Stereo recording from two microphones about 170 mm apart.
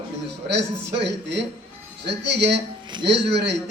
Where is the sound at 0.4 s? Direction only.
90° right.